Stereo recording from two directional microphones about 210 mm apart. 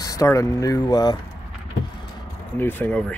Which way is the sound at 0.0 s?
15° left (ahead or behind).